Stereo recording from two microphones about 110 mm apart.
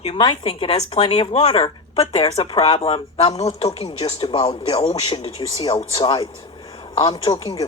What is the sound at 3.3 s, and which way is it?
Speech, 70° left (ahead or behind).